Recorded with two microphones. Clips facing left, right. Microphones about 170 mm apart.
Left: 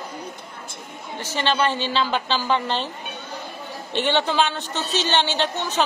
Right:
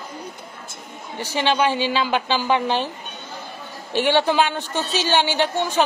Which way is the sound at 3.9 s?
10° right (ahead or behind).